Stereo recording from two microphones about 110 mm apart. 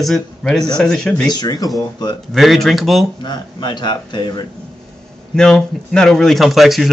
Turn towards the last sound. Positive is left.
turn(degrees=0)  # may be behind; listen again after turning